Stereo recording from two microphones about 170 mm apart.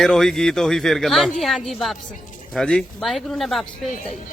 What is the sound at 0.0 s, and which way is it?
Speech, centre (ahead or behind).